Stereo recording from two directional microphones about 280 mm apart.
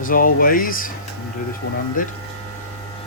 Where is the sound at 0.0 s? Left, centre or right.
Left.